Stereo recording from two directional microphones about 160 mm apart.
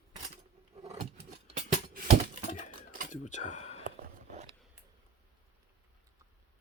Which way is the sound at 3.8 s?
50° right (ahead or behind).